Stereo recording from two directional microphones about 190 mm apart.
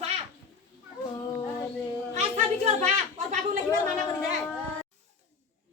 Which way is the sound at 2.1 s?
35° right (ahead or behind).